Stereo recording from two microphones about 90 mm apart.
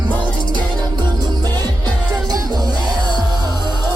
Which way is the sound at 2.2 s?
45° right (ahead or behind).